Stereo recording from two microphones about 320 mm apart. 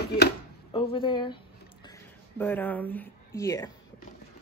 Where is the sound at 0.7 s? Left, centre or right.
Centre.